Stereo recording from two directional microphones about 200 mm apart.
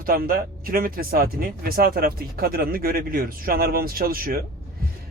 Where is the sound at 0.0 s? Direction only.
45° right (ahead or behind).